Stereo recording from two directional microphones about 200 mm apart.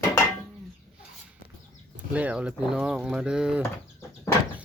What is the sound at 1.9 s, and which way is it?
Speech, 5° right (ahead or behind).